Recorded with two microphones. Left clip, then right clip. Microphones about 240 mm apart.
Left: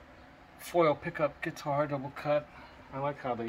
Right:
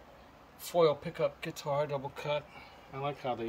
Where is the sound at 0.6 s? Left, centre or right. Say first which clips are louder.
Even; centre.